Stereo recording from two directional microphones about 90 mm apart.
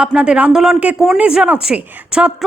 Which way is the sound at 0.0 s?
10° right (ahead or behind).